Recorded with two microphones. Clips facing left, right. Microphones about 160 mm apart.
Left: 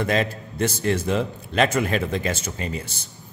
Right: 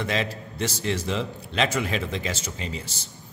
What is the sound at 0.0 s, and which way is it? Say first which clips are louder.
A man's voice: left 5 dB; 50° left (ahead or behind).